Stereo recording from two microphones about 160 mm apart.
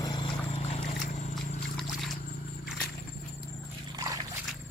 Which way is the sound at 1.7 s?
Centre (ahead or behind).